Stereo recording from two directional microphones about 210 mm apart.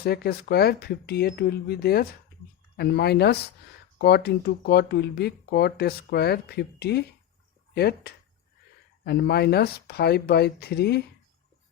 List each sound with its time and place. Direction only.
0.0 s speech: 50° left (ahead or behind)